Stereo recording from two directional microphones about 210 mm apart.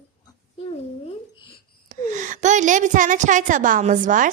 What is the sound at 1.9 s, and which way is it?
A woman's voice, 35° right (ahead or behind).